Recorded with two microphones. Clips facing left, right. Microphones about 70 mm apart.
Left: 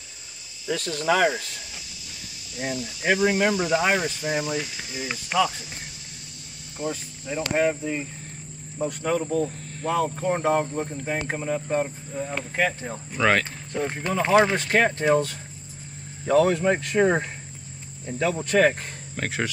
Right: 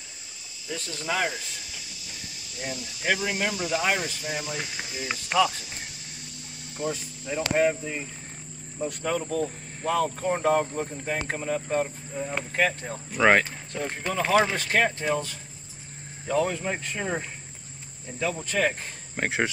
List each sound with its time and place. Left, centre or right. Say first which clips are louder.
0.7 s speech: left 8 dB; left
2.6 s speech: left 4 dB; left
5.0 s speech: even; centre
6.8 s speech: left 1 dB; centre
10.7 s speech: left 2 dB; centre
11.1 s speech: left 2 dB; centre
13.2 s speech: right 2 dB; centre
13.7 s speech: left 3 dB; centre
15.0 s speech: left 6 dB; left
18.4 s speech: left 7 dB; left
19.1 s speech: right 2 dB; right